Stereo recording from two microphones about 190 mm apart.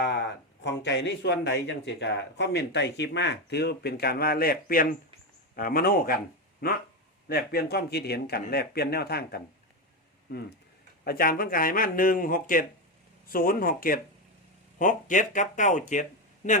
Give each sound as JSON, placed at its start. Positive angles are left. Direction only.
{"t": 0.0, "sound": "speech", "side_deg": 65}
{"t": 7.3, "sound": "speech", "side_deg": 50}
{"t": 11.0, "sound": "speech", "side_deg": 50}